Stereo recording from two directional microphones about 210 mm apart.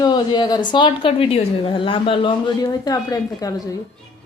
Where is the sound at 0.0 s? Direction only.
20° left (ahead or behind).